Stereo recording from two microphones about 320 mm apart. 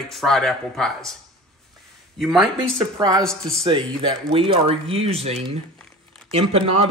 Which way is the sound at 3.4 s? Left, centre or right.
Centre.